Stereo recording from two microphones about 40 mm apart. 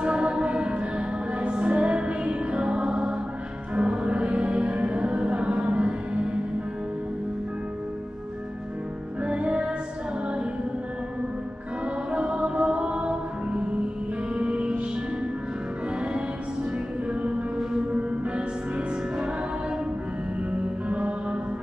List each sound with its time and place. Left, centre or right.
0.0 s music: right
9.2 s music: right
11.8 s music: right
17.1 s music: right
17.9 s music: right
20.9 s music: right